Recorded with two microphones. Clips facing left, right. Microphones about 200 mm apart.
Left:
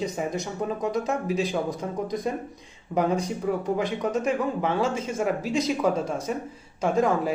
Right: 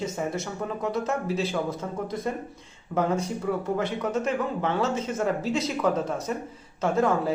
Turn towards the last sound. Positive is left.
turn(degrees=15)  # may be behind; listen again after turning